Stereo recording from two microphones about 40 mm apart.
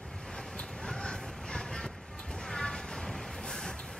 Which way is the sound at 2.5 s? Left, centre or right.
Centre.